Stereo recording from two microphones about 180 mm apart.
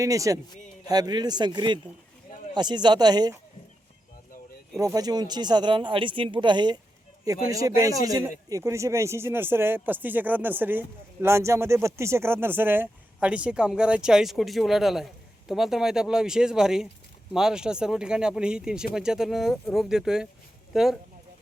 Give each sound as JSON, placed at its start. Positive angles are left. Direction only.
{"t": 0.0, "sound": "speech", "side_deg": -20}
{"t": 4.9, "sound": "speech", "side_deg": -20}